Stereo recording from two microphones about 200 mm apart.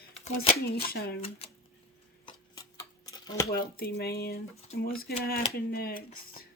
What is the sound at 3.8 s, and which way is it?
Speech, 50° left (ahead or behind).